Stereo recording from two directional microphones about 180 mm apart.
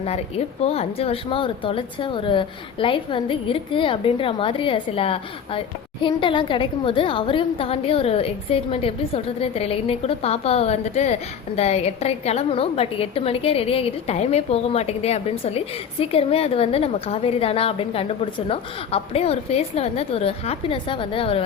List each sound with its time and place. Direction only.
0.0 s speech: 35° left (ahead or behind)